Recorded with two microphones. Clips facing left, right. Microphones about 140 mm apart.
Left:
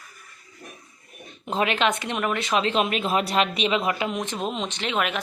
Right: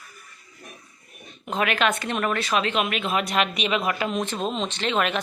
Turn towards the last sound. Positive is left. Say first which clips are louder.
# right 2 dB
turn(degrees=10)  # may be behind; listen again after turning